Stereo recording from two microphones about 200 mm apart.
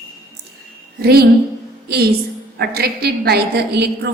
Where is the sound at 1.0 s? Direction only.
50° right (ahead or behind).